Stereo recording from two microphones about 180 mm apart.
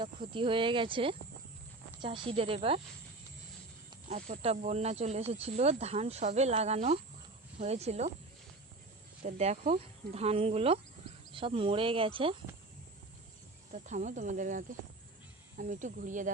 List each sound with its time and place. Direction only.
0.0 s speech: 25° right (ahead or behind)
4.1 s speech: 40° right (ahead or behind)
9.2 s speech: 35° right (ahead or behind)
13.7 s speech: 40° right (ahead or behind)